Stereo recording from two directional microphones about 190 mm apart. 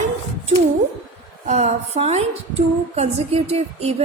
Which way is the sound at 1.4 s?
35° right (ahead or behind).